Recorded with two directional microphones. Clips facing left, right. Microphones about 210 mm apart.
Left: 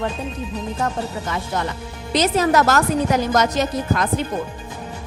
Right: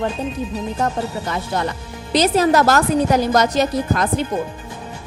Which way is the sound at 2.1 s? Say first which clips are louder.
Right 2 dB; 35° right (ahead or behind).